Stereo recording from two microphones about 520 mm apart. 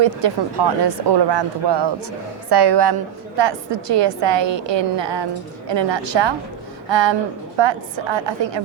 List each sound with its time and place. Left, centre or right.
0.0 s a woman's voice: right